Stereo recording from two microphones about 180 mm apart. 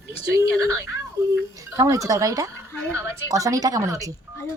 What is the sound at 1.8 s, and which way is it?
A woman's voice, 20° right (ahead or behind).